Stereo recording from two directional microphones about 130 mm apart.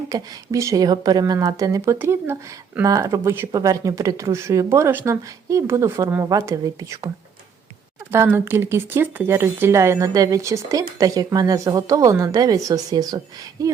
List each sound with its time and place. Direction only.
0.1 s a woman's voice: 25° right (ahead or behind)
8.1 s a woman's voice: 20° right (ahead or behind)